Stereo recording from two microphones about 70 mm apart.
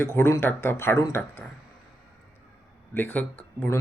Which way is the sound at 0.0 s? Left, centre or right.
Left.